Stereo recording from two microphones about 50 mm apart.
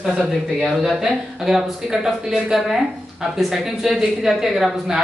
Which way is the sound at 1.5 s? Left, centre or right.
Centre.